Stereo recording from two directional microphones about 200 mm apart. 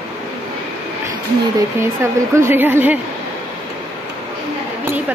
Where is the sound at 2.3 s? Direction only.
10° right (ahead or behind).